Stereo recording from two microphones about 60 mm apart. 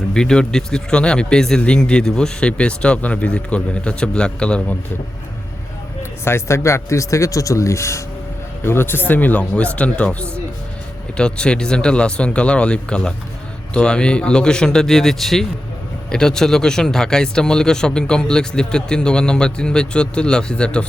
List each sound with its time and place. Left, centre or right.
0.1 s a man's voice: centre
6.0 s speech: left
8.6 s a man's voice: left; by 20.8 s centre